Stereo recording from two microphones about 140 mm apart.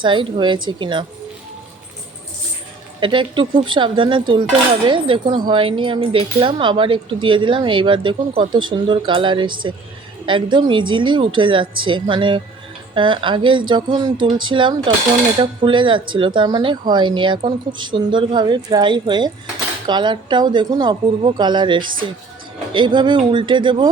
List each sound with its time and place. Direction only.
0.0 s speech: 35° right (ahead or behind)
3.0 s speech: 35° right (ahead or behind)